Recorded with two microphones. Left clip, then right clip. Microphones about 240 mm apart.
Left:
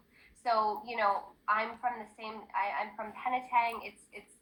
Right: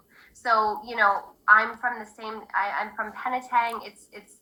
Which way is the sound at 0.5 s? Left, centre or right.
Right.